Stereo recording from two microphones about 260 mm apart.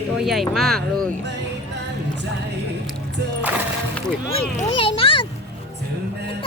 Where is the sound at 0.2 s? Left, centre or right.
Centre.